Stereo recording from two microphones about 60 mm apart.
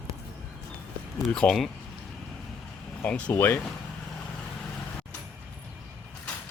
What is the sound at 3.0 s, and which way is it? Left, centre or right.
Speech, left.